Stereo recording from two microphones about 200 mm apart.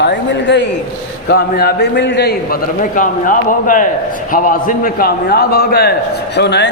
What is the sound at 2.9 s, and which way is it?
A man's voice, 40° left (ahead or behind).